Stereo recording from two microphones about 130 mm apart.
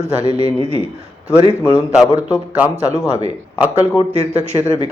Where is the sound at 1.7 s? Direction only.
5° right (ahead or behind).